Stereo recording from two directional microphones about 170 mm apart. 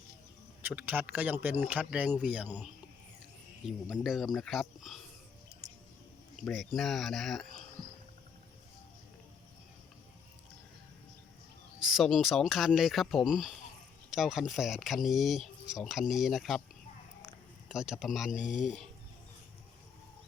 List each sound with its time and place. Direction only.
0.6 s speech: 10° right (ahead or behind)
6.5 s speech: centre (ahead or behind)
11.9 s speech: centre (ahead or behind)
17.2 s a sound: 5° right (ahead or behind)
18.3 s speech: 45° left (ahead or behind)